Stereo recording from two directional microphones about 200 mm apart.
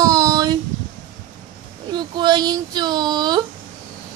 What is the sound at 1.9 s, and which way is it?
Speech, 20° right (ahead or behind).